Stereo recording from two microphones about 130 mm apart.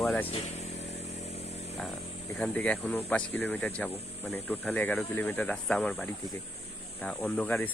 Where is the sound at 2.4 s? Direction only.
10° left (ahead or behind).